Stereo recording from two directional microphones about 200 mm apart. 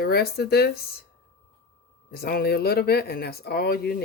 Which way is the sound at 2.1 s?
50° left (ahead or behind).